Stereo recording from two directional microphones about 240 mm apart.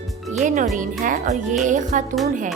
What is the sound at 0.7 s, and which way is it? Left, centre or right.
Speech, right.